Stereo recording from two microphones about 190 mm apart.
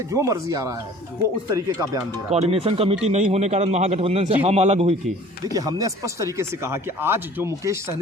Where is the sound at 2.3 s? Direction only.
30° right (ahead or behind).